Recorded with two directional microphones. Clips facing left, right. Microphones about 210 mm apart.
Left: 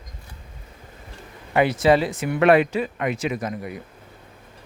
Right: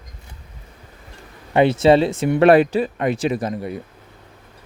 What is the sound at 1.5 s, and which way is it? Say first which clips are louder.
Speech: right 4 dB; 25° right (ahead or behind).